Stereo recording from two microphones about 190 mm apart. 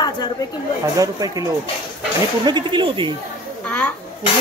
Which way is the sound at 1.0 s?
20° right (ahead or behind).